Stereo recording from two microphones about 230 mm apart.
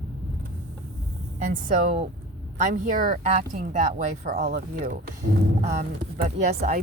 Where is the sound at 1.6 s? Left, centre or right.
Right.